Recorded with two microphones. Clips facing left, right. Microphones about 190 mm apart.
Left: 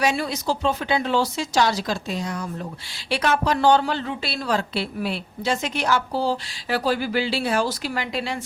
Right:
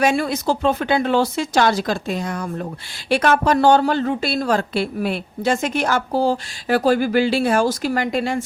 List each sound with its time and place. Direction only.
0.0 s a woman's voice: 50° right (ahead or behind)